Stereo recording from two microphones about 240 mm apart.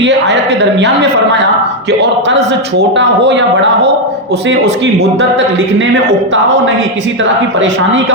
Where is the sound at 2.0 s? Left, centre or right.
Right.